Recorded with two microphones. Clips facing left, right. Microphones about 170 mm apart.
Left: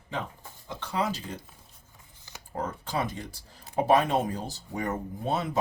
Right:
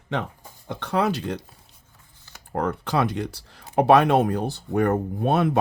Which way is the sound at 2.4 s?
65° right (ahead or behind).